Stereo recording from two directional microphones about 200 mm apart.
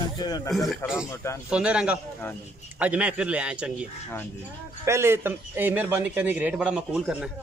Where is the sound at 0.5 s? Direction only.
Centre (ahead or behind).